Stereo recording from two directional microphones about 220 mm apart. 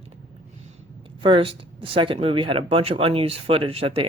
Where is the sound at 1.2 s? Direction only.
25° right (ahead or behind).